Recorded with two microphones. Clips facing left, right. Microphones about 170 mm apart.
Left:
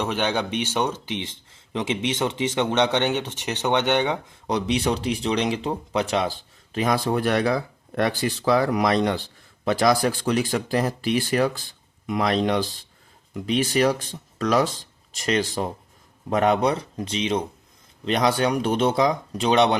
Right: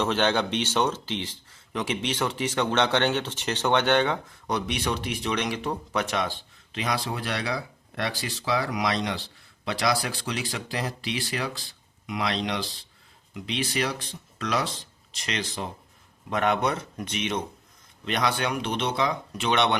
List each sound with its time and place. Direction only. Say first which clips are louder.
0.0 s speech: even; 10° left (ahead or behind)
4.4 s speech: left 5 dB; 30° left (ahead or behind)
6.7 s speech: left 7 dB; 45° left (ahead or behind)